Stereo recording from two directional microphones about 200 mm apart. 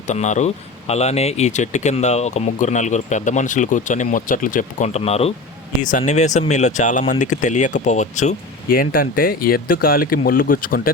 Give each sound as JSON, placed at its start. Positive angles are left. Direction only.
{"t": 0.1, "sound": "speech", "side_deg": 35}